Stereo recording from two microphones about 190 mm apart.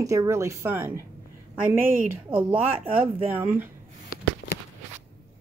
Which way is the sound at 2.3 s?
5° right (ahead or behind).